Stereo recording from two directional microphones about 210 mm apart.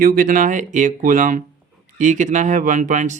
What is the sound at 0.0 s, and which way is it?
Speech, 40° right (ahead or behind).